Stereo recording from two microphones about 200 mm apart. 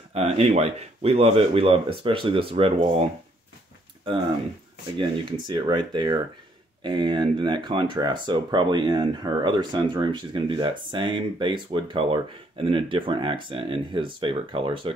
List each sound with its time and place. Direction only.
0.1 s speech: 30° right (ahead or behind)
4.9 s speech: 25° right (ahead or behind)